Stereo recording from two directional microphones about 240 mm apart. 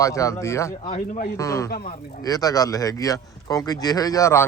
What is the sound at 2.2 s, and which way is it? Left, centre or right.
Speech, centre.